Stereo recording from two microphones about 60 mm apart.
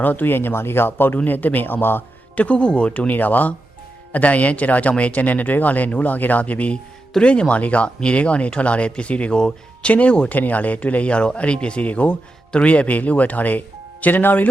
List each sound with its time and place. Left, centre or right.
0.0 s speech: left
2.3 s speech: left
3.1 s speech: left